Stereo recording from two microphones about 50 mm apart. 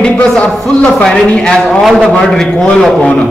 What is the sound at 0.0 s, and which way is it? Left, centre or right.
A man's voice, left.